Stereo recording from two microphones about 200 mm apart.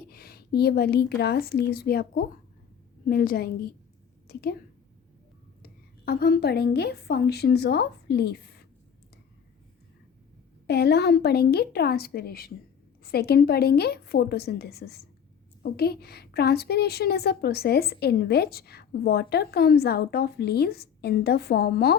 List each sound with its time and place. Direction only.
0.1 s a woman's voice: 50° left (ahead or behind)
5.6 s a woman's voice: 50° left (ahead or behind)
10.7 s a woman's voice: 55° left (ahead or behind)